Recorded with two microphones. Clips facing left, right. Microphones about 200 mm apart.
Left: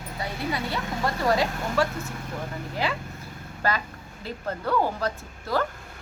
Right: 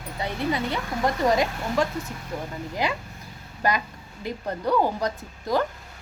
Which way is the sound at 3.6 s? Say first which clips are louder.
Right 2 dB; 15° right (ahead or behind).